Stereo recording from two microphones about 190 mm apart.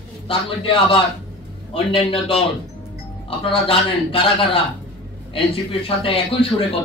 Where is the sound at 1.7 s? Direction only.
30° left (ahead or behind).